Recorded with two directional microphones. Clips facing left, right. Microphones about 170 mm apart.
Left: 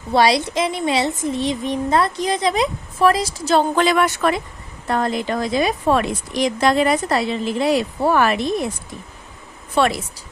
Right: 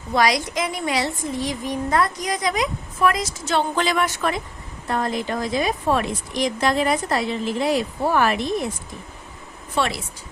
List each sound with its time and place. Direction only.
0.1 s a woman's voice: 30° left (ahead or behind)
3.8 s speech: 60° left (ahead or behind)
4.9 s a woman's voice: 80° left
9.7 s speech: 60° left (ahead or behind)